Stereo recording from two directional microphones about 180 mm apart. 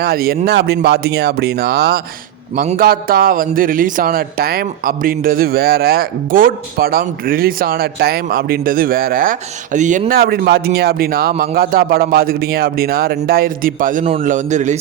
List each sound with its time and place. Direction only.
0.0 s speech: 60° right (ahead or behind)
2.6 s speech: 50° right (ahead or behind)
9.7 s a man's voice: 45° right (ahead or behind)